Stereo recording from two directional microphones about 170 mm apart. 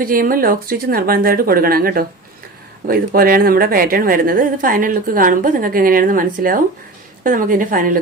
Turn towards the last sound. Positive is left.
turn(degrees=-55)  # may be behind; listen again after turning